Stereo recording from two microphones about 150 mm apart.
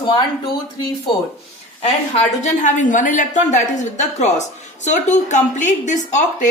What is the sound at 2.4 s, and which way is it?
A woman's voice, 55° left (ahead or behind).